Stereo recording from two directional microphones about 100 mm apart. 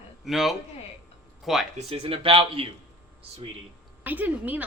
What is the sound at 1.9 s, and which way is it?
Speech, 70° right (ahead or behind).